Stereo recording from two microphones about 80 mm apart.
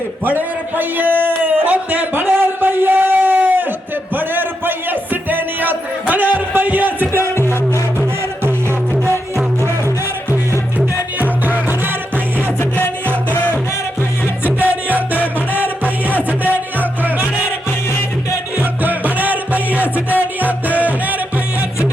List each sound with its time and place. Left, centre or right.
0.3 s a man's voice: right
1.5 s a sound: centre
4.1 s music: right
10.8 s music: right
12.5 s music: left
14.6 s music: right
18.5 s music: right